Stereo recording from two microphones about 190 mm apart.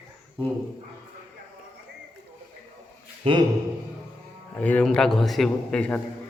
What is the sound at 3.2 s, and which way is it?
Speech, 25° right (ahead or behind).